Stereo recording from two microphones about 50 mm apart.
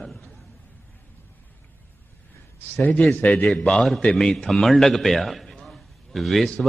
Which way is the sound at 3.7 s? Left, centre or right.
Centre.